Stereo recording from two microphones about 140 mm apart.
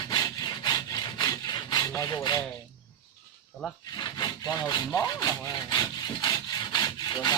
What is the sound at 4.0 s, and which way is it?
Wood, 30° left (ahead or behind).